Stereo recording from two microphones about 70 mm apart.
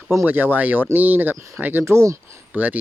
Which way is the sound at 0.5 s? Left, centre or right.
Right.